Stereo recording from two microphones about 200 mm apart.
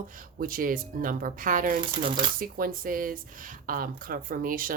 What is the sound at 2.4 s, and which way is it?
Speech, 45° right (ahead or behind).